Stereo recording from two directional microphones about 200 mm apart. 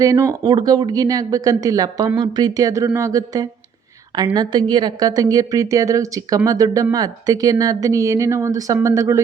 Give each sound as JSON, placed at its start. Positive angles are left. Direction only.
{"t": 0.0, "sound": "speech", "side_deg": -15}